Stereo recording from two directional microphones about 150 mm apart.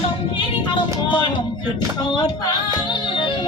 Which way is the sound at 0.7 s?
35° left (ahead or behind).